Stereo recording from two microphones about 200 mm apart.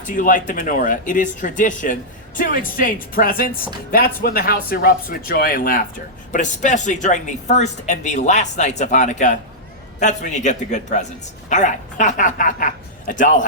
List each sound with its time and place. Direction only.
0.0 s speech: 40° left (ahead or behind)